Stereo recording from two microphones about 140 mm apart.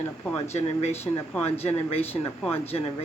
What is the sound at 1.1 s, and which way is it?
Speech, 15° left (ahead or behind).